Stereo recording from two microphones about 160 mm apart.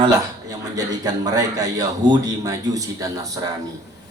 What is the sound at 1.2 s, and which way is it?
A man's voice, 25° right (ahead or behind).